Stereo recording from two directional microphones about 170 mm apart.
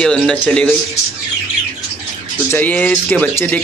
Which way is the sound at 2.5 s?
10° left (ahead or behind).